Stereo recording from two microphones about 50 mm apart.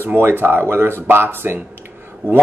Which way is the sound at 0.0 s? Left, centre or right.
Right.